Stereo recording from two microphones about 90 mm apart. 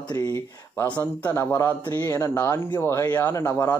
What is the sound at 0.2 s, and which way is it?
Speech, 35° left (ahead or behind).